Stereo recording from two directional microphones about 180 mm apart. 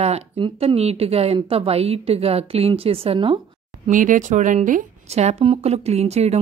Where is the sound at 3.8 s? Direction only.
45° right (ahead or behind).